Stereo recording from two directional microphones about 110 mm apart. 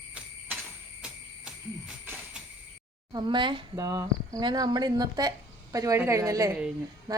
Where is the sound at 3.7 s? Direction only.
35° right (ahead or behind).